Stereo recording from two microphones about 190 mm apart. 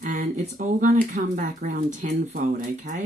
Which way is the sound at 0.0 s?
45° right (ahead or behind).